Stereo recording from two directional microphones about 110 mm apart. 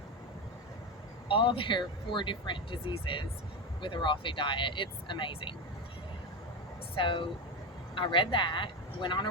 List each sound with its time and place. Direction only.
1.3 s speech: 50° left (ahead or behind)
6.9 s speech: 50° left (ahead or behind)